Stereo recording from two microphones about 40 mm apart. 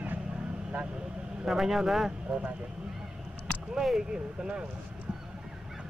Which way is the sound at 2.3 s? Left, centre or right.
Right.